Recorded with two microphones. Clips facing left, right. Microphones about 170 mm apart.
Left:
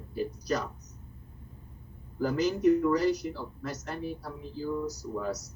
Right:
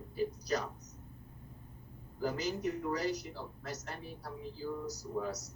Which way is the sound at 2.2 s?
70° left (ahead or behind).